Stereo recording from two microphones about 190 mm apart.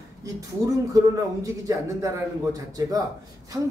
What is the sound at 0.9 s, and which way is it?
A man's voice, 15° right (ahead or behind).